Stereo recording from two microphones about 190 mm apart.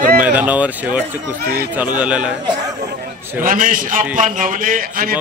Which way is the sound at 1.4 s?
55° right (ahead or behind).